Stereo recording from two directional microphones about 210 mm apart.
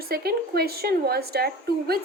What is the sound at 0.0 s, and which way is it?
Speech, 45° right (ahead or behind).